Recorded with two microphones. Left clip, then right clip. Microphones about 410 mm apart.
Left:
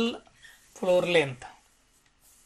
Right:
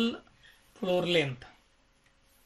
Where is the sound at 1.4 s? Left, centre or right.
Left.